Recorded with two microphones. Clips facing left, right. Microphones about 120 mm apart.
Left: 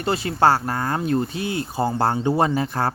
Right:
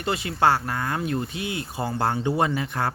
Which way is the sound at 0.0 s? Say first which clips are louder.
Left 3 dB; 35° left (ahead or behind).